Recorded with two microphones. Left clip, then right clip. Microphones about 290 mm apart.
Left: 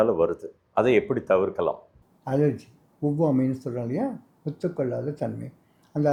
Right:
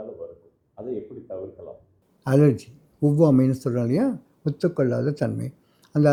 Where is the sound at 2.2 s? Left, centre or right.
Right.